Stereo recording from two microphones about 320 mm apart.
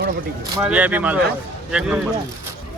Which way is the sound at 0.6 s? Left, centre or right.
Centre.